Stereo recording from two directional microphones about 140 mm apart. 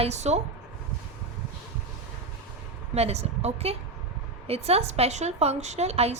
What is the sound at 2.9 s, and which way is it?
A woman's voice, 50° right (ahead or behind).